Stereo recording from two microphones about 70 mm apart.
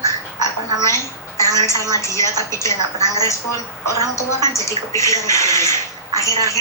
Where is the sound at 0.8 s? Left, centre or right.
Left.